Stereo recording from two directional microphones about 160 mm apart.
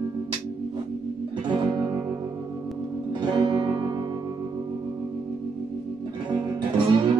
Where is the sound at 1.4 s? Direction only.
25° right (ahead or behind).